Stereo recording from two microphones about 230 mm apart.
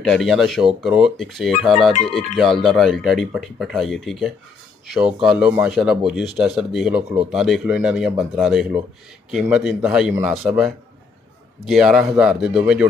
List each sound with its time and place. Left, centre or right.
0.0 s a man's voice: centre